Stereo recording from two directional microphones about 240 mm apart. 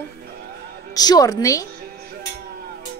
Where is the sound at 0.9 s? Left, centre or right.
Centre.